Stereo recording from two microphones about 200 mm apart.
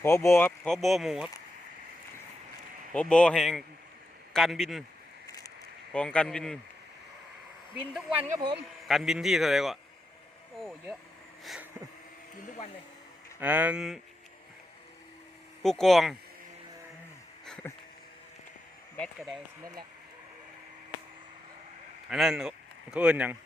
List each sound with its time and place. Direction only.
0.0 s speech: 15° left (ahead or behind); by 1.3 s centre (ahead or behind)
2.9 s speech: 5° left (ahead or behind)
5.2 s a sound: 15° left (ahead or behind)
5.9 s speech: 5° left (ahead or behind)
7.9 s speech: 10° right (ahead or behind)
11.4 s a sound: 5° right (ahead or behind)
13.4 s speech: 10° right (ahead or behind)
15.6 s speech: centre (ahead or behind)
17.4 s music: 5° left (ahead or behind)
22.1 s speech: centre (ahead or behind)